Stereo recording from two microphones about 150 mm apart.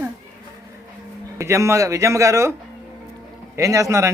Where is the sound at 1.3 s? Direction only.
20° right (ahead or behind).